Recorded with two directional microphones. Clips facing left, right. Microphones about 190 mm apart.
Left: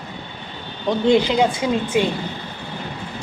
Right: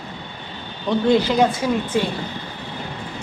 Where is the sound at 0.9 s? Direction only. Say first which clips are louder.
Left 1 dB; 15° left (ahead or behind).